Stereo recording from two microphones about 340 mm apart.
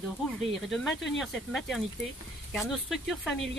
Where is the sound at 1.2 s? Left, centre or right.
Centre.